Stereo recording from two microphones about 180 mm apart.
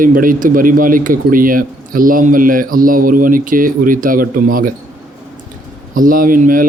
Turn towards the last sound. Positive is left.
turn(degrees=-50)  # may be behind; listen again after turning